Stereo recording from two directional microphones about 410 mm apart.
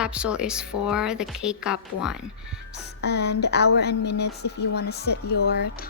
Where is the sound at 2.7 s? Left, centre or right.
Left.